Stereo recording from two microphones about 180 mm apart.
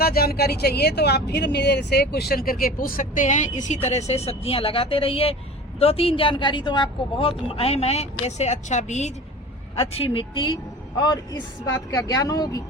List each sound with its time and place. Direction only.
0.0 s a woman's voice: 55° left (ahead or behind); by 9.1 s 40° left (ahead or behind)
9.7 s speech: 30° left (ahead or behind)